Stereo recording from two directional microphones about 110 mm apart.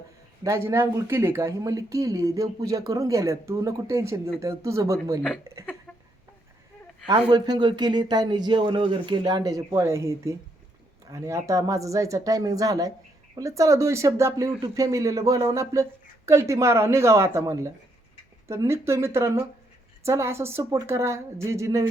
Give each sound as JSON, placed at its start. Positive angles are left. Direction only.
{"t": 0.4, "sound": "speech", "side_deg": -25}
{"t": 7.1, "sound": "speech", "side_deg": -40}